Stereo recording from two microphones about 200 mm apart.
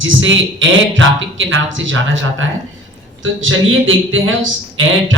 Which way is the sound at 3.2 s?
80° right.